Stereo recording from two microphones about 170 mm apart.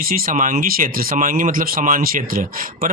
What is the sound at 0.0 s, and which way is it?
Speech, 55° right (ahead or behind).